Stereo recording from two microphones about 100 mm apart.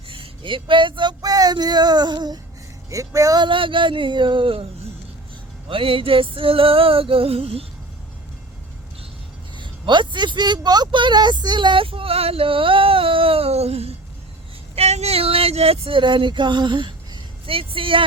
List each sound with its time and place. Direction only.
0.1 s speech: 60° right (ahead or behind)
1.2 s child singing: 40° right (ahead or behind)
2.9 s speech: 35° right (ahead or behind)
3.4 s speech: 55° right (ahead or behind)
5.6 s music: 70° right (ahead or behind)
9.6 s speech: 55° right (ahead or behind)